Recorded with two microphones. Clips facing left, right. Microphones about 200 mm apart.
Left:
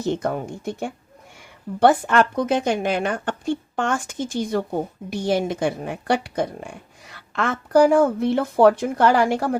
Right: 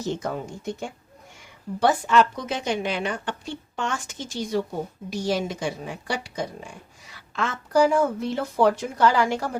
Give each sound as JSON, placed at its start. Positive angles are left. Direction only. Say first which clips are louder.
{"t": 0.0, "sound": "a woman's voice", "louder": "left 5 dB", "side_deg": 55}